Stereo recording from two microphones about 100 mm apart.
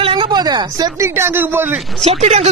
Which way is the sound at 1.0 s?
25° right (ahead or behind).